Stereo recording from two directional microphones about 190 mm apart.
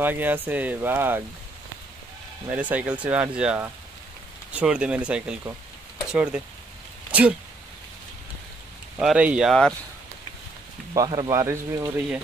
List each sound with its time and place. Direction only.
0.0 s speech: 10° right (ahead or behind)
2.5 s speech: 5° right (ahead or behind)
7.1 s a sound: 5° right (ahead or behind)
8.9 s speech: 5° right (ahead or behind)
10.9 s speech: 25° right (ahead or behind)